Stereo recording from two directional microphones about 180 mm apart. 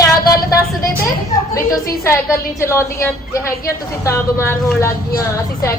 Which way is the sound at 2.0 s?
15° left (ahead or behind).